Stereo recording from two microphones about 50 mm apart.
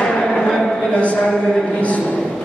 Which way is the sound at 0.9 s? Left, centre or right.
Left.